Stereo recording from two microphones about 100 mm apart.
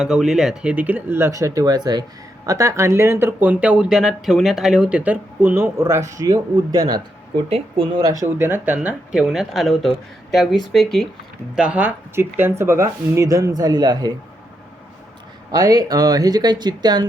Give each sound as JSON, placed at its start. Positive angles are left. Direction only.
{"t": 0.0, "sound": "speech", "side_deg": -5}
{"t": 2.5, "sound": "speech", "side_deg": -30}
{"t": 11.5, "sound": "speech", "side_deg": -10}
{"t": 15.5, "sound": "speech", "side_deg": -40}